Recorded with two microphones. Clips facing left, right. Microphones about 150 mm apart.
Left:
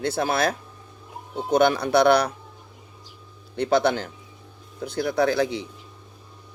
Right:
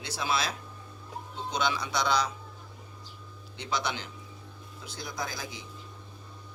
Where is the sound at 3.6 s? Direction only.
60° left (ahead or behind).